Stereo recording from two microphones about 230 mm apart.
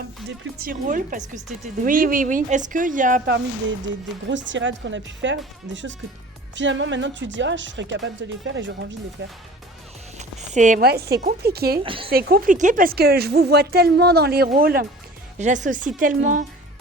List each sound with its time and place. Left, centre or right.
0.6 s speech: right
4.3 s a woman's voice: right
6.6 s a woman's voice: right
10.2 s a woman's voice: right
11.8 s a woman's voice: right
12.1 s a woman's voice: right